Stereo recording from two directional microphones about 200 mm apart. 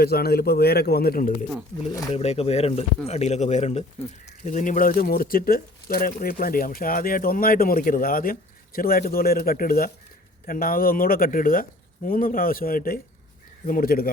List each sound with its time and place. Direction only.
0.0 s speech: 50° left (ahead or behind)
2.1 s a man's voice: 30° left (ahead or behind); by 14.1 s 45° left (ahead or behind)